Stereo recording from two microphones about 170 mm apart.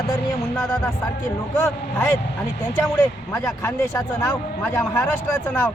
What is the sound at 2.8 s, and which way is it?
A man's voice, 15° left (ahead or behind).